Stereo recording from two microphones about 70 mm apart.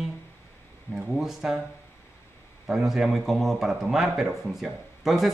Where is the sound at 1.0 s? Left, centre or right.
Centre.